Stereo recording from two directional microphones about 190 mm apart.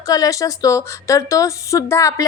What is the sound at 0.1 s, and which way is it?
A woman's voice, 20° left (ahead or behind).